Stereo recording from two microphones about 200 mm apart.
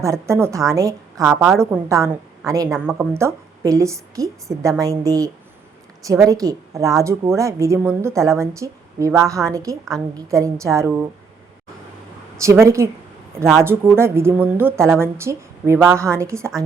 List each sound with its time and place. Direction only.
0.0 s a woman's voice: 15° right (ahead or behind)
2.6 s a woman's voice: 5° right (ahead or behind)
12.4 s a woman's voice: 15° right (ahead or behind)
13.4 s speech: centre (ahead or behind)
13.7 s a woman's voice: 10° right (ahead or behind)